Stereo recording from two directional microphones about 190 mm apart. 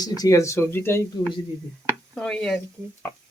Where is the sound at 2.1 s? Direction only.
5° left (ahead or behind).